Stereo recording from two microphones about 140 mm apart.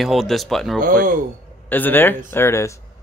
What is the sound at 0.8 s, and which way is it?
Speech, 65° right (ahead or behind).